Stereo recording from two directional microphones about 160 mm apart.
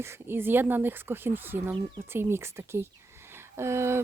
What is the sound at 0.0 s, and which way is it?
Speech, 15° right (ahead or behind).